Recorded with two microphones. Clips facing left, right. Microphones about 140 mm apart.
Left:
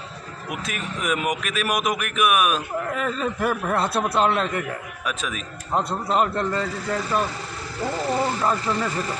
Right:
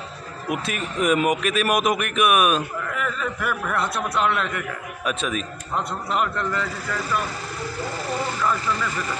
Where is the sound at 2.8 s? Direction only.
30° left (ahead or behind).